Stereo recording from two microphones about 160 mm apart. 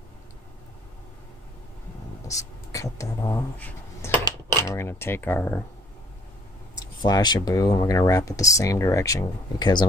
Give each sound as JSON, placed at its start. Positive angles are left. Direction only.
{"t": 2.2, "sound": "speech", "side_deg": 20}
{"t": 3.5, "sound": "speech", "side_deg": 10}
{"t": 7.0, "sound": "speech", "side_deg": 25}